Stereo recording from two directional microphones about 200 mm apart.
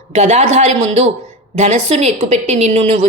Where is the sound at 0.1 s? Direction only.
35° right (ahead or behind).